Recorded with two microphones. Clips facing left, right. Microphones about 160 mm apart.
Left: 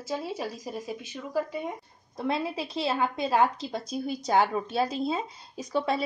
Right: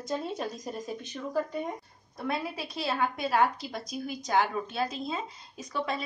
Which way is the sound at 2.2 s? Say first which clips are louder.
Left 4 dB; 25° left (ahead or behind).